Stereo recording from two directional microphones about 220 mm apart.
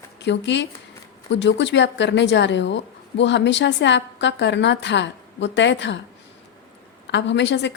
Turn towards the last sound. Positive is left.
turn(degrees=55)  # may be behind; listen again after turning